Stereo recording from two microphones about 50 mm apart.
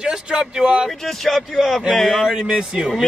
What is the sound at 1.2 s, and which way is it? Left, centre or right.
Speech, centre.